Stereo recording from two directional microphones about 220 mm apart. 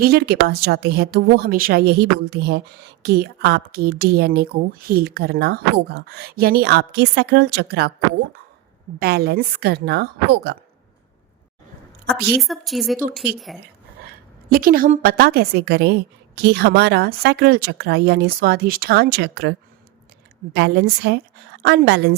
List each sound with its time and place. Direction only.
0.0 s speech: 45° right (ahead or behind)
12.4 s a woman's voice: centre (ahead or behind)
14.0 s speech: 45° right (ahead or behind)